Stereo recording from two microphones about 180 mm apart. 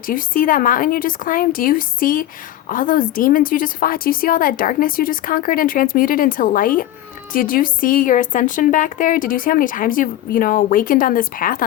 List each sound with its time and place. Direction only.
0.0 s a woman's voice: 50° left (ahead or behind)